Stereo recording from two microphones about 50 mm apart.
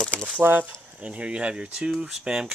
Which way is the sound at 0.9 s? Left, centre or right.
Right.